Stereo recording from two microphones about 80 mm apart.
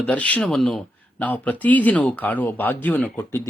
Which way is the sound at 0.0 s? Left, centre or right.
Centre.